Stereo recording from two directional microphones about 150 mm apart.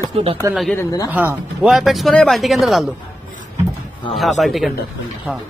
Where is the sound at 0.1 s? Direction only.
40° right (ahead or behind).